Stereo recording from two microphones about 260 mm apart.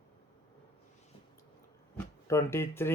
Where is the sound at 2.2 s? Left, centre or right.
Centre.